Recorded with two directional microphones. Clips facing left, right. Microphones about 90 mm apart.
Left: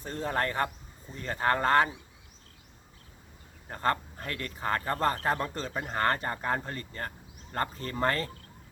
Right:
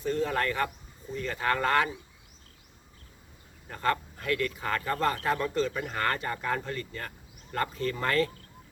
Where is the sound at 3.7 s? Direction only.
35° left (ahead or behind).